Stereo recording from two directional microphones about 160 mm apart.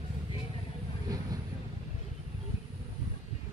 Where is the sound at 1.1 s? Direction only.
25° right (ahead or behind).